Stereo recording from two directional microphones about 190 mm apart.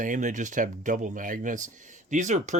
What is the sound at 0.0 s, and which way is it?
Speech, 40° right (ahead or behind).